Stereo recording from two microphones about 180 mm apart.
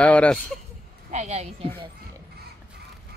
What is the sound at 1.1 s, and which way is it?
Speech, 40° right (ahead or behind).